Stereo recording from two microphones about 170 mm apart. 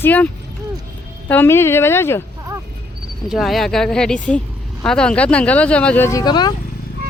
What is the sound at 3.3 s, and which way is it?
Speech, centre (ahead or behind).